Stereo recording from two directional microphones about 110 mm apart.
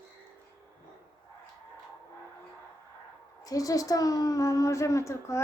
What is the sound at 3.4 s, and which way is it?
A woman's voice, 35° left (ahead or behind).